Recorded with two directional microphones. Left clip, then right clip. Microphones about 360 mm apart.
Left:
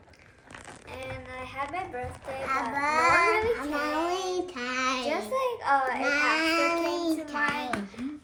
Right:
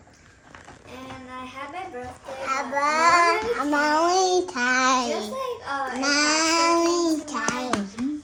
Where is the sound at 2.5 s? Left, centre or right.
Right.